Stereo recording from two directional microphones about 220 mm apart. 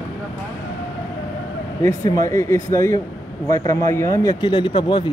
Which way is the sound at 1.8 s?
15° left (ahead or behind).